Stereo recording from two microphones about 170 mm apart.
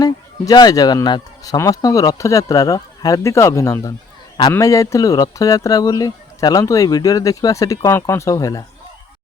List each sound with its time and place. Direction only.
0.0 s speech: 20° left (ahead or behind)